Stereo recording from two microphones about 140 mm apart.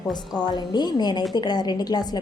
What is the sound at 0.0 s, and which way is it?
A woman's voice, 30° left (ahead or behind).